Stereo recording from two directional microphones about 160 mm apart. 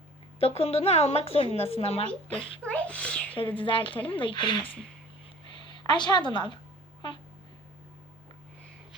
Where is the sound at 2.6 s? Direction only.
10° left (ahead or behind).